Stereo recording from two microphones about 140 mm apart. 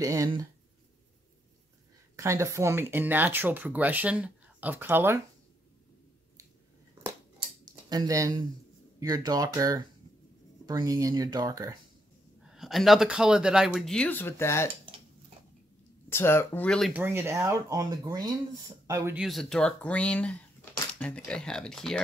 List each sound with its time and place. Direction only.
0.0 s speech: 25° right (ahead or behind)
2.1 s speech: 20° right (ahead or behind)
7.6 s speech: 30° right (ahead or behind)
12.4 s speech: centre (ahead or behind); by 14.7 s 15° left (ahead or behind)
16.1 s speech: 15° left (ahead or behind)
16.9 s speech: 15° right (ahead or behind)
19.1 s speech: centre (ahead or behind)